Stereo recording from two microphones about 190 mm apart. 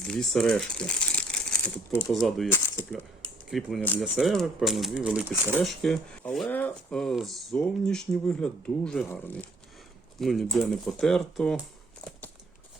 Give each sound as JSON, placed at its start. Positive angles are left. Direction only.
{"t": 0.0, "sound": "speech", "side_deg": 5}
{"t": 3.8, "sound": "speech", "side_deg": 10}